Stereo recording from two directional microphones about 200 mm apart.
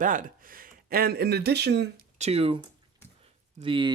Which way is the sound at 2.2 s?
30° right (ahead or behind).